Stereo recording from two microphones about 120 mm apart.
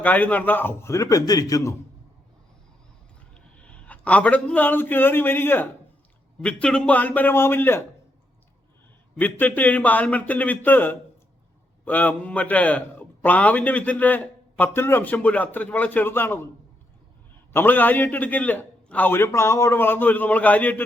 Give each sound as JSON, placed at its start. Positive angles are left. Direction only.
{"t": 0.0, "sound": "a man's voice", "side_deg": 15}
{"t": 3.3, "sound": "a man's voice", "side_deg": 10}
{"t": 9.1, "sound": "a man's voice", "side_deg": 15}
{"t": 17.5, "sound": "a man's voice", "side_deg": 15}